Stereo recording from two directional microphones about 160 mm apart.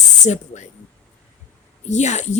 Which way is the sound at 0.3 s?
45° left (ahead or behind).